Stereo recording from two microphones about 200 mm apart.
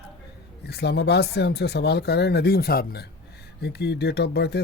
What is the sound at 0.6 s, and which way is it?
Speech, 55° left (ahead or behind).